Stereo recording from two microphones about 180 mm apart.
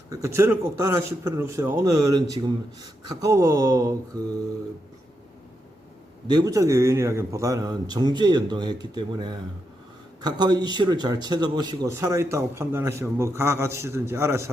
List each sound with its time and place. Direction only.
0.1 s a man's voice: 15° right (ahead or behind)
6.2 s a man's voice: 20° right (ahead or behind)